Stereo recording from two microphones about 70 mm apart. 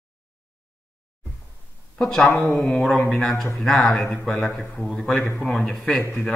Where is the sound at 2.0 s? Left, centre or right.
Centre.